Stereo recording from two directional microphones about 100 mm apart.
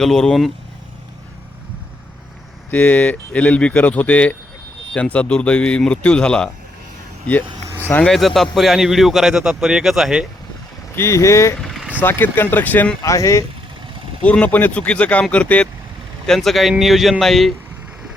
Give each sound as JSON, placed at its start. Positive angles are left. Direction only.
{"t": 0.0, "sound": "a man's voice", "side_deg": 5}
{"t": 2.6, "sound": "speech", "side_deg": 15}
{"t": 8.0, "sound": "a man's voice", "side_deg": 0}
{"t": 10.9, "sound": "speech", "side_deg": 30}
{"t": 11.6, "sound": "vehicle", "side_deg": 5}
{"t": 12.0, "sound": "speech", "side_deg": 20}
{"t": 13.0, "sound": "speech", "side_deg": 35}
{"t": 14.2, "sound": "speech", "side_deg": 15}
{"t": 16.2, "sound": "a man's voice", "side_deg": 5}